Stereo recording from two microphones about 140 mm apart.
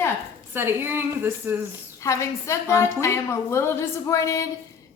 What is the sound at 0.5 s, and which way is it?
A woman's voice, 15° right (ahead or behind).